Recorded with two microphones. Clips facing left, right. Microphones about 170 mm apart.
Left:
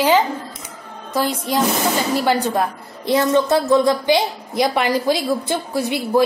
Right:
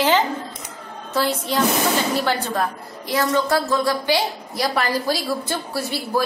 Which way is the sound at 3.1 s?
25° left (ahead or behind).